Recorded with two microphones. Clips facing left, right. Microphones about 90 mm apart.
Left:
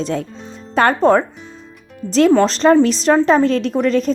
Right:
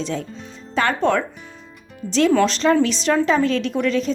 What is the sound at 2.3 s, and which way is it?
A woman's voice, 35° left (ahead or behind).